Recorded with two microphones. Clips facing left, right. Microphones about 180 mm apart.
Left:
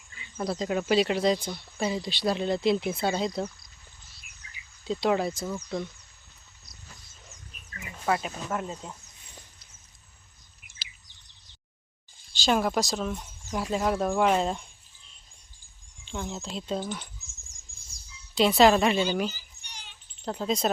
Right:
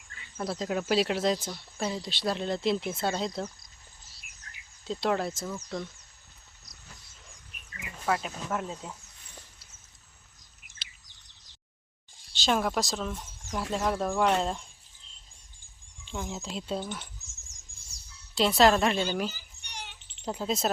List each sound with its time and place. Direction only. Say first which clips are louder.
0.1 s speech: left 3 dB; centre (ahead or behind)
4.9 s speech: left 3 dB; centre (ahead or behind)
8.0 s speech: left 2 dB; 5° left (ahead or behind)
12.3 s speech: left 2 dB; centre (ahead or behind)
16.0 s speech: left 1 dB; 5° right (ahead or behind)
18.3 s speech: left 2 dB; centre (ahead or behind)
19.4 s a sound: right 6 dB; 65° right (ahead or behind)
20.2 s speech: left 2 dB; 5° right (ahead or behind)